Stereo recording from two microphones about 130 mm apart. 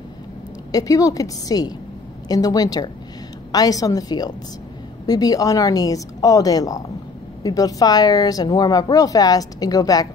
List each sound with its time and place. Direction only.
0.7 s speech: 25° left (ahead or behind)